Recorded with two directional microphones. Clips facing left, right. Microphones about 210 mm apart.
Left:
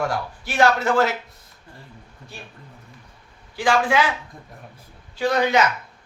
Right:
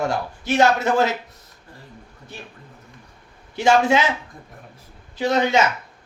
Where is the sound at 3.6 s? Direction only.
25° right (ahead or behind).